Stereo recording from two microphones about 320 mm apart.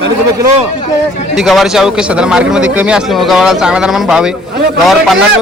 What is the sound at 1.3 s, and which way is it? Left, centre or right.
Speech, centre.